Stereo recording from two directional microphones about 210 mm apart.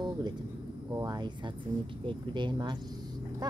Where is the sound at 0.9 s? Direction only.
20° right (ahead or behind).